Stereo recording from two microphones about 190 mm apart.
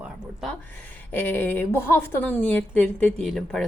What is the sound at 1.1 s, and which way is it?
A woman's voice, 10° left (ahead or behind).